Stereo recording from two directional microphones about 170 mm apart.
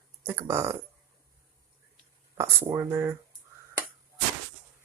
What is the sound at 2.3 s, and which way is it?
Speech, 15° right (ahead or behind).